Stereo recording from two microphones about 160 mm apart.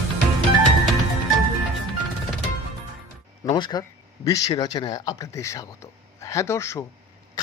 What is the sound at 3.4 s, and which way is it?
A man's voice, 25° left (ahead or behind).